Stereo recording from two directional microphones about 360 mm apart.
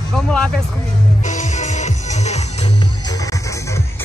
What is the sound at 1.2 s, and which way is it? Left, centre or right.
Music, centre.